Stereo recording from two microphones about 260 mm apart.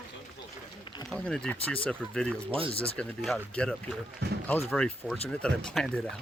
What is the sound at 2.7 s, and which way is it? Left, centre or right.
Speech, left.